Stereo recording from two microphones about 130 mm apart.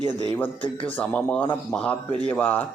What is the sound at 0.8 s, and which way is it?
Speech, 10° left (ahead or behind).